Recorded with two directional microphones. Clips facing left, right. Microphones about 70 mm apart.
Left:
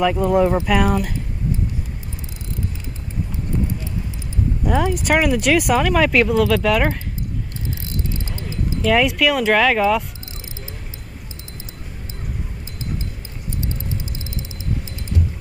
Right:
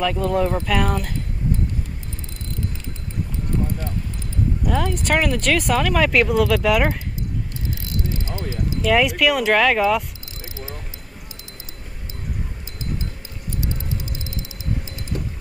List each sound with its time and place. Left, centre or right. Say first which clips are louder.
0.0 s speech: left 4 dB; centre
4.6 s speech: left 4 dB; centre
8.1 s a sound: right 1 dB; right
8.8 s speech: left 1 dB; centre
15.1 s music: left 4 dB; right